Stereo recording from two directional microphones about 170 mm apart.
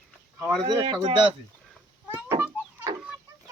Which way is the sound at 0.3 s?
Centre (ahead or behind).